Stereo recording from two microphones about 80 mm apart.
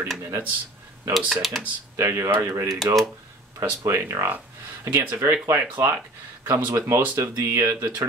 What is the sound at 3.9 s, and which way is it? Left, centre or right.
Speech, right.